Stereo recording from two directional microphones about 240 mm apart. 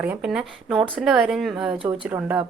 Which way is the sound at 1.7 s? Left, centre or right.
Right.